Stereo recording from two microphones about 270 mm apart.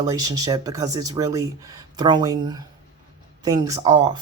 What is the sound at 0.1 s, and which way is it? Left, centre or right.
Speech, centre.